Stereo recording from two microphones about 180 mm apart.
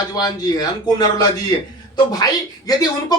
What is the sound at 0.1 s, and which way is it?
Speech, 20° left (ahead or behind).